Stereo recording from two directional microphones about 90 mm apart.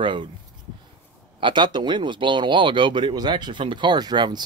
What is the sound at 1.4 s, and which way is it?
Speech, 60° right (ahead or behind).